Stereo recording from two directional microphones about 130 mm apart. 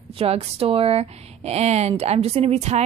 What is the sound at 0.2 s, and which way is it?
A woman's voice, 50° right (ahead or behind).